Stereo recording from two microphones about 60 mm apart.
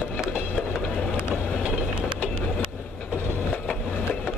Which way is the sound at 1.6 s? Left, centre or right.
Centre.